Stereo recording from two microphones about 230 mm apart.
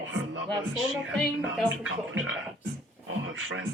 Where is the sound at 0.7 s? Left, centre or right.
Centre.